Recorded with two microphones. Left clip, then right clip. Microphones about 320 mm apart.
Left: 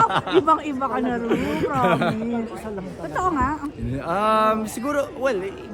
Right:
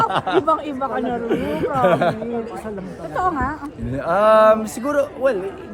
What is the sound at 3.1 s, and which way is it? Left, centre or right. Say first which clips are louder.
Speech: right 1 dB; centre.